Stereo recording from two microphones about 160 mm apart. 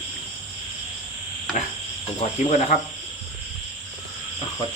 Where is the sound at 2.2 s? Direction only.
50° left (ahead or behind).